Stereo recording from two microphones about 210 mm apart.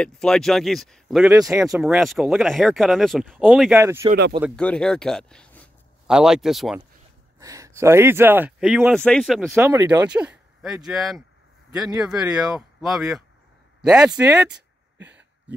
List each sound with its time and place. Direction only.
0.0 s speech: 5° left (ahead or behind)
1.3 s speech: 15° right (ahead or behind)
1.8 s speech: centre (ahead or behind)
3.8 s speech: 15° right (ahead or behind)
4.6 s speech: 5° left (ahead or behind)
7.3 s speech: 15° right (ahead or behind); by 9.6 s centre (ahead or behind)
9.6 s speech: 10° right (ahead or behind)
15.0 s a sound: 55° right (ahead or behind)